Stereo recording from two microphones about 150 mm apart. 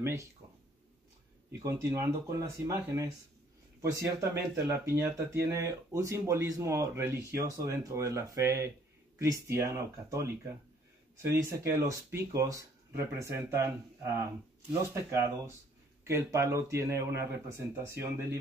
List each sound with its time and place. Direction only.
0.0 s speech: 20° right (ahead or behind)
1.6 s speech: 20° right (ahead or behind)